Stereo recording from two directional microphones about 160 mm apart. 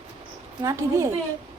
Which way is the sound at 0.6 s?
20° right (ahead or behind).